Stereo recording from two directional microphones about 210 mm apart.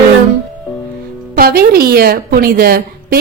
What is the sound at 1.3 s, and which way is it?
A woman's voice, 45° right (ahead or behind).